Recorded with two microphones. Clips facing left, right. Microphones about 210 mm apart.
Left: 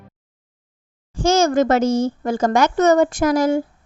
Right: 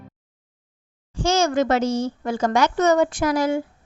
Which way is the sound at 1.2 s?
45° left (ahead or behind).